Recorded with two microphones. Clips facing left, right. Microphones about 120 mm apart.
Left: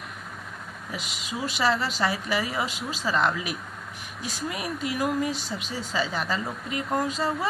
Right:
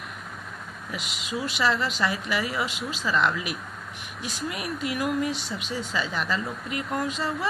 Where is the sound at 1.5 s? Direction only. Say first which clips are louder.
Left 1 dB; 35° left (ahead or behind).